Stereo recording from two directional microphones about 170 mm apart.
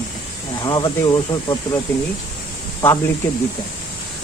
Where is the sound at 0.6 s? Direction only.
25° left (ahead or behind).